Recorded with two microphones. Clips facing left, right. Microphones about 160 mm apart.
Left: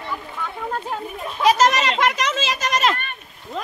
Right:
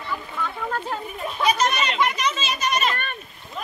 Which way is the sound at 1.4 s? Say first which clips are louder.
Left 5 dB; 90° left.